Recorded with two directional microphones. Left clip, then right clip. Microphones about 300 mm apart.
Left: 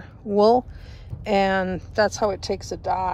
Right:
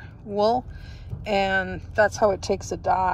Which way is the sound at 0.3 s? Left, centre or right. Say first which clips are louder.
Left 5 dB; centre.